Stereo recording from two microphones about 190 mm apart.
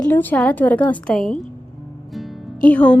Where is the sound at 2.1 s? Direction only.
Centre (ahead or behind).